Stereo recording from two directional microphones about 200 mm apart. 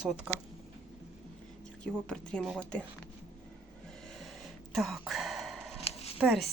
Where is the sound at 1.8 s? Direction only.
5° left (ahead or behind).